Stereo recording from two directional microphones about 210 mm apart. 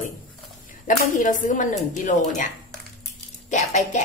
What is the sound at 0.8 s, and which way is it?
Speech, 40° left (ahead or behind).